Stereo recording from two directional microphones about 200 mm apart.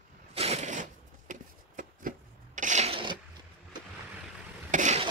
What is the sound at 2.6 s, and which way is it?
Rub, 35° right (ahead or behind).